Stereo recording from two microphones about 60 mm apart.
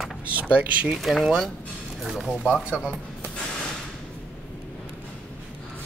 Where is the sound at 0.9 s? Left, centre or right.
Centre.